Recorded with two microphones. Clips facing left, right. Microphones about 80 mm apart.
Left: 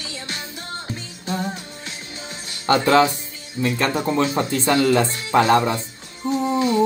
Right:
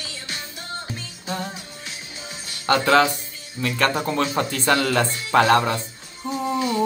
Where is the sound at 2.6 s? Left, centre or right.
Left.